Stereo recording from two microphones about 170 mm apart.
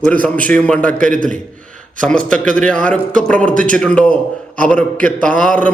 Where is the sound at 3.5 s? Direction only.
50° right (ahead or behind).